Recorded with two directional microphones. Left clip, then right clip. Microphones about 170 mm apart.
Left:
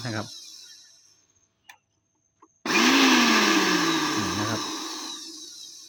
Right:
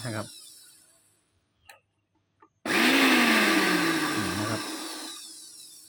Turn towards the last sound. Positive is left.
turn(degrees=5)  # may be behind; listen again after turning